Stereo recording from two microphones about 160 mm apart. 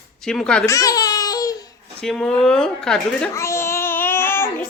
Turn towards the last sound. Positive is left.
turn(degrees=15)  # may be behind; listen again after turning